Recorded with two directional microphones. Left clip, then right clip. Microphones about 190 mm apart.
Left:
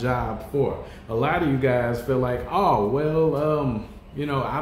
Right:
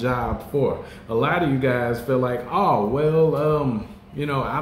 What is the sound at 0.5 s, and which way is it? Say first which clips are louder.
Speech: right 2 dB; 5° right (ahead or behind).